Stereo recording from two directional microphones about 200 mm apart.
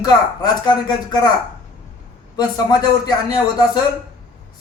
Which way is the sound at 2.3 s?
20° left (ahead or behind).